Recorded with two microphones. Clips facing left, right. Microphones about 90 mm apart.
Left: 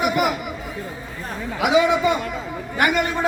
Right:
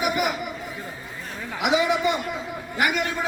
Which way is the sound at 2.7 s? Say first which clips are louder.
Left 4 dB; 55° left (ahead or behind).